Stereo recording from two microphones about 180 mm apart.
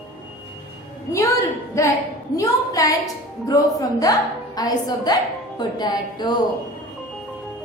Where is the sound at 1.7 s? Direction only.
15° left (ahead or behind).